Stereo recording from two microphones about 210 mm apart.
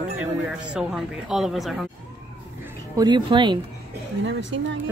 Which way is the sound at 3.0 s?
20° right (ahead or behind).